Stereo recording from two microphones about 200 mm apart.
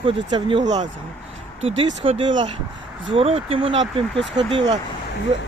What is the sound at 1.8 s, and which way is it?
Speech, 30° right (ahead or behind).